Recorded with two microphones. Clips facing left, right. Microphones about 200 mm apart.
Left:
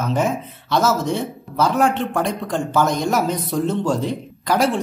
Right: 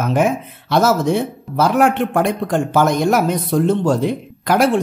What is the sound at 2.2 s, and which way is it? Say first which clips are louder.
Speech: right 5 dB; 60° right (ahead or behind).